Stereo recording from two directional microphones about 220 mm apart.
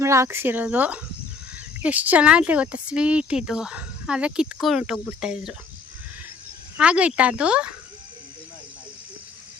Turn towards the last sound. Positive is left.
turn(degrees=-5)  # may be behind; listen again after turning